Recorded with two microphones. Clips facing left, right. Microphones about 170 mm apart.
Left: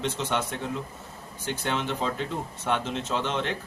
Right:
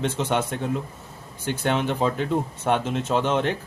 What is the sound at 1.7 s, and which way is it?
A man's voice, 50° right (ahead or behind).